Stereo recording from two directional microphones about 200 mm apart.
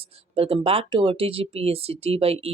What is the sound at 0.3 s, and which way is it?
Speech, 30° right (ahead or behind).